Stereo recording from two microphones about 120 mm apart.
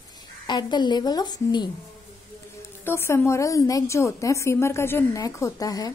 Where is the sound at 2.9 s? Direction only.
20° left (ahead or behind).